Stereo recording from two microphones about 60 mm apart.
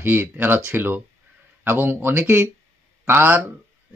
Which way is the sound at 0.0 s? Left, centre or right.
Right.